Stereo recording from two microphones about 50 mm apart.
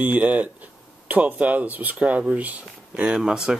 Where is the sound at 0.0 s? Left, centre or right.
Right.